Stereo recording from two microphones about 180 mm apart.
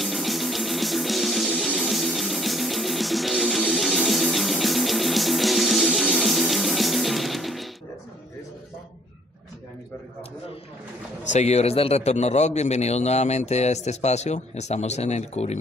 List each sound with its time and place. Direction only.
0.0 s music: centre (ahead or behind)
11.3 s a man's voice: 40° left (ahead or behind)